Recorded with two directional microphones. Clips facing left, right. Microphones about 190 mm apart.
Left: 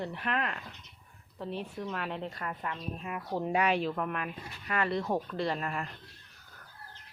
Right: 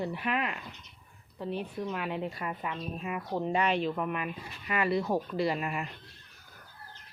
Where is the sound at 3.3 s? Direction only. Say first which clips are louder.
Even; 5° left (ahead or behind).